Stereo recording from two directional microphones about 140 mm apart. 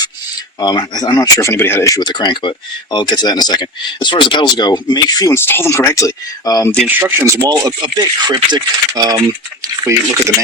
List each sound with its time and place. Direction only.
0.6 s speech: 30° left (ahead or behind)
6.8 s speech: 15° right (ahead or behind)
7.4 s speech: 30° right (ahead or behind)